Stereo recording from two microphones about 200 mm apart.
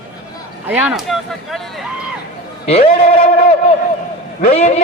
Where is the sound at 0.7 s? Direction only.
5° right (ahead or behind).